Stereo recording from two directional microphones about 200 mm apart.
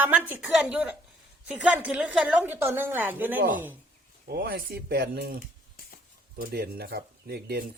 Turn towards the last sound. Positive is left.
turn(degrees=-50)  # may be behind; listen again after turning